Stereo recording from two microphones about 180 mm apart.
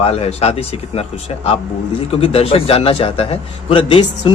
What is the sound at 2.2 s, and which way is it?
A man's voice, 35° left (ahead or behind).